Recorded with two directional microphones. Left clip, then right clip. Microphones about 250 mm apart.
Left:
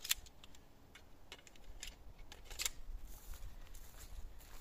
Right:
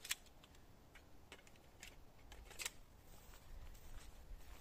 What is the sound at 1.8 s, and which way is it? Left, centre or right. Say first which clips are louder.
Scissors: left 7 dB; left.